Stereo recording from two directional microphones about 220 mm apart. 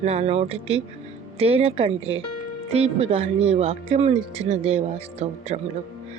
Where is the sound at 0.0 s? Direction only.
30° right (ahead or behind).